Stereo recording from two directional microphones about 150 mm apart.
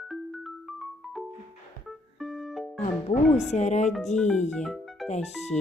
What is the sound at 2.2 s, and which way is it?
Music, centre (ahead or behind).